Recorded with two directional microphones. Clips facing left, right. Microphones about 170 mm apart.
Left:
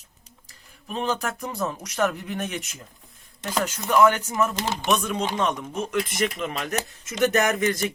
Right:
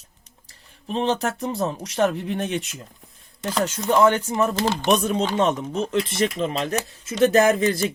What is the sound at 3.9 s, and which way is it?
Speech, 30° right (ahead or behind).